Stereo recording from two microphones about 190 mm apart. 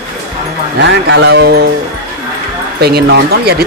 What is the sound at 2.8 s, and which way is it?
Speech, 55° right (ahead or behind).